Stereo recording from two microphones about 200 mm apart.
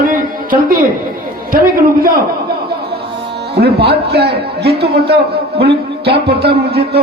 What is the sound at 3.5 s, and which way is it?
A man's voice, 55° right (ahead or behind).